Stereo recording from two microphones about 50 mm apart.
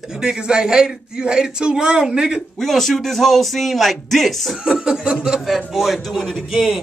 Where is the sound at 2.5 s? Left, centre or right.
Centre.